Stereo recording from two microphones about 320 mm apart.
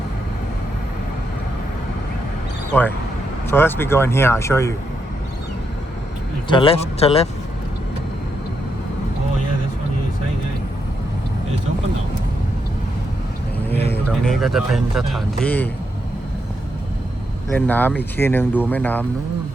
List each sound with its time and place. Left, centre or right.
3.5 s speech: centre
6.5 s speech: centre
13.7 s speech: centre
17.5 s speech: centre